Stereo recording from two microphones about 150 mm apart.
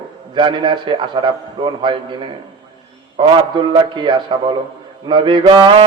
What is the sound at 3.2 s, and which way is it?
Music, 30° right (ahead or behind).